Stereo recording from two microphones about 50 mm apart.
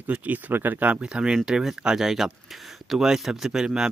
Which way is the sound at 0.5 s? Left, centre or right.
Right.